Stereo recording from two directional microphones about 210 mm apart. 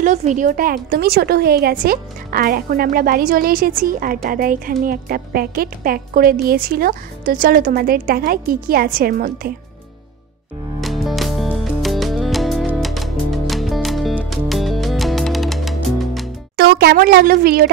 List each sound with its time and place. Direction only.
0.0 s a woman's voice: 35° right (ahead or behind)
10.8 s music: centre (ahead or behind)
16.5 s speech: 45° right (ahead or behind)